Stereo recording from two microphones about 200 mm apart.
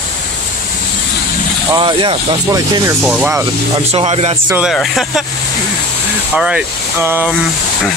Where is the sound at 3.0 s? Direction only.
5° right (ahead or behind).